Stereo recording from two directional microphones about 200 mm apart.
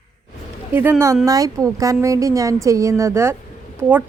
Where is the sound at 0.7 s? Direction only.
10° right (ahead or behind).